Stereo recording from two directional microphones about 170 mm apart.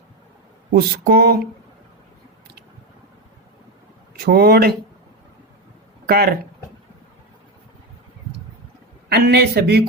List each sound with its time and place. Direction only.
0.7 s speech: 65° right (ahead or behind)
4.1 s speech: 65° right (ahead or behind)
6.1 s speech: 65° right (ahead or behind)
9.1 s speech: 75° right (ahead or behind)